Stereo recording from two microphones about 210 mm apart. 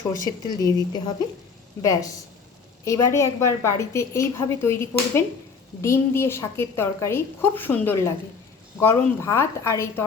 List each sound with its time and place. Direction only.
0.2 s a woman's voice: 15° left (ahead or behind)